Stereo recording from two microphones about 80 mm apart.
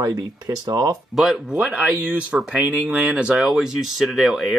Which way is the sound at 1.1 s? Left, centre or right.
Centre.